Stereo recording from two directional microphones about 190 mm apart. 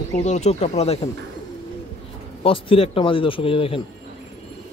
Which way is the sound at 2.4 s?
30° left (ahead or behind).